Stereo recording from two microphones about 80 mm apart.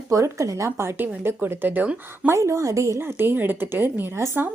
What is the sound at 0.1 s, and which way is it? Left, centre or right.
Speech, right.